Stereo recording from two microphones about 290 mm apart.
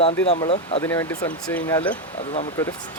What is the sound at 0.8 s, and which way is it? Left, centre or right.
Speech, centre.